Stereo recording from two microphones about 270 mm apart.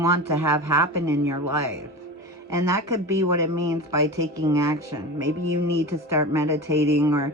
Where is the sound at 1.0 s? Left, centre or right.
Centre.